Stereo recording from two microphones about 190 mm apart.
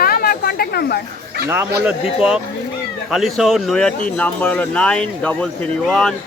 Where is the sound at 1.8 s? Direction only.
5° right (ahead or behind).